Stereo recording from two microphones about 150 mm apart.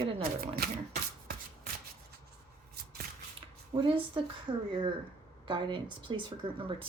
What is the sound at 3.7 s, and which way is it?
Speech, 40° right (ahead or behind).